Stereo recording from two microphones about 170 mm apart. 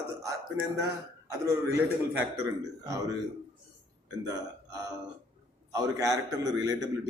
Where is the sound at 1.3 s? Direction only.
15° right (ahead or behind).